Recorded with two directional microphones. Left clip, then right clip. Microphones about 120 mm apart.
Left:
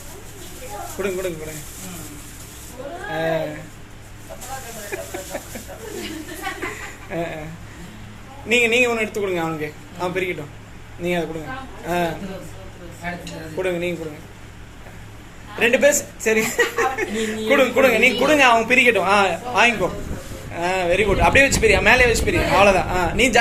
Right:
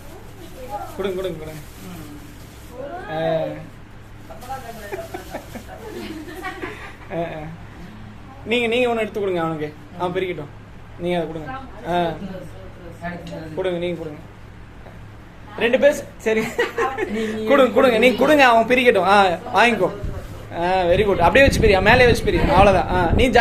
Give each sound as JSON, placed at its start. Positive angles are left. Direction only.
{"t": 0.9, "sound": "speech", "side_deg": -5}
{"t": 3.1, "sound": "speech", "side_deg": 0}
{"t": 4.9, "sound": "a sound", "side_deg": -5}
{"t": 7.1, "sound": "speech", "side_deg": -5}
{"t": 8.4, "sound": "a man's voice", "side_deg": -15}
{"t": 13.6, "sound": "a man's voice", "side_deg": -5}
{"t": 15.5, "sound": "a woman's voice", "side_deg": -15}
{"t": 17.5, "sound": "a man's voice", "side_deg": -55}
{"t": 20.5, "sound": "speech", "side_deg": -30}